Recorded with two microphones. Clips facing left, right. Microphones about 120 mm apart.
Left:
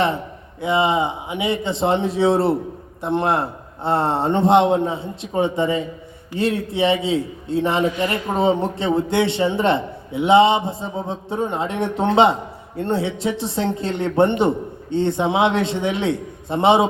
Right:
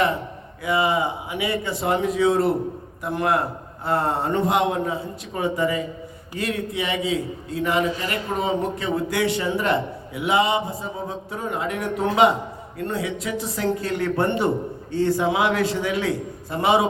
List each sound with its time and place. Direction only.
0.6 s a man's voice: 25° left (ahead or behind)